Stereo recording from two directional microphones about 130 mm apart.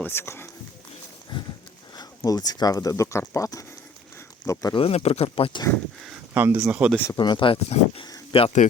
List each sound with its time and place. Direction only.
0.0 s speech: 20° left (ahead or behind)
2.0 s speech: 30° left (ahead or behind)
4.7 s speech: 50° left (ahead or behind)
6.3 s speech: 15° right (ahead or behind)
7.2 s speech: 35° left (ahead or behind)